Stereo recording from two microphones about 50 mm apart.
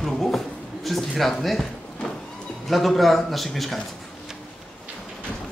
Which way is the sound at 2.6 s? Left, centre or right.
Centre.